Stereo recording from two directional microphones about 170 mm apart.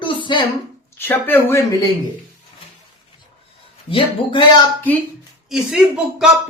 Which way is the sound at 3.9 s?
30° left (ahead or behind).